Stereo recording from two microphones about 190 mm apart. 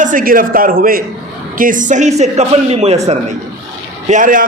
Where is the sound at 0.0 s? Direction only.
45° right (ahead or behind).